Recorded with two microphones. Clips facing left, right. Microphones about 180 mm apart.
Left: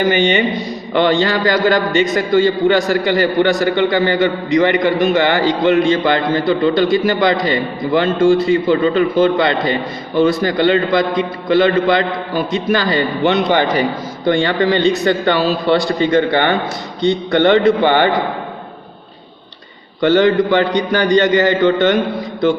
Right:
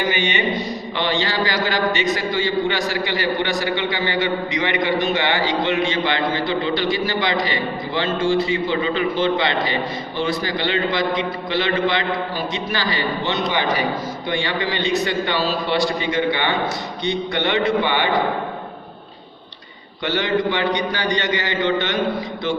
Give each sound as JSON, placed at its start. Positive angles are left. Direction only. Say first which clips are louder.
{"t": 0.1, "sound": "a man's voice", "louder": "left 7 dB", "side_deg": 50}
{"t": 20.0, "sound": "a man's voice", "louder": "left 9 dB", "side_deg": 50}